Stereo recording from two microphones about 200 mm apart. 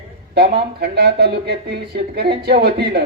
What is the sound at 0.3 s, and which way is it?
Speech, 50° right (ahead or behind).